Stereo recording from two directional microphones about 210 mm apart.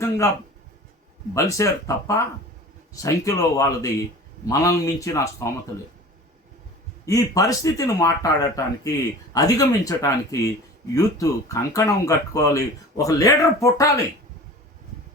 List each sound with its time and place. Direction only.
1.3 s speech: 15° left (ahead or behind)
7.0 s speech: 15° left (ahead or behind)